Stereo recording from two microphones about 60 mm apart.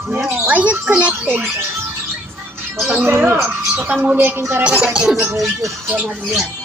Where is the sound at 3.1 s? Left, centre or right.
Right.